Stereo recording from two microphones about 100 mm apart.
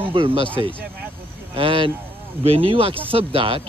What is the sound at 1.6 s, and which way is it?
Speech, 60° right (ahead or behind).